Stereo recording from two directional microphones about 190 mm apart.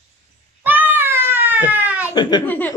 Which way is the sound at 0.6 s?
10° right (ahead or behind).